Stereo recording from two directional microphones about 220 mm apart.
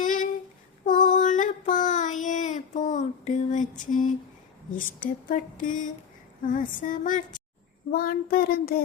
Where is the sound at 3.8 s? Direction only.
35° left (ahead or behind).